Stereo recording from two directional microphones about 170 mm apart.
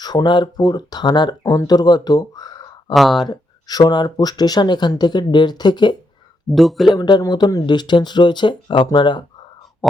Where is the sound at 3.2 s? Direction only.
25° left (ahead or behind).